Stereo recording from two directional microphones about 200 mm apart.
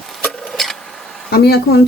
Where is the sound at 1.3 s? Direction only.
50° left (ahead or behind).